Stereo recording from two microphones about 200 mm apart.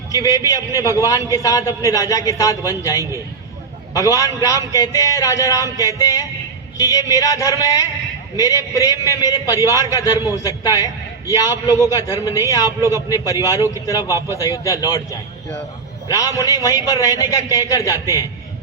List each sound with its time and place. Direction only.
0.1 s a man's voice: 15° left (ahead or behind)